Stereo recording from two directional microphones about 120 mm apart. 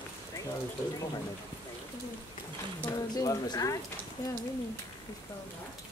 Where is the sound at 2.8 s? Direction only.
30° left (ahead or behind).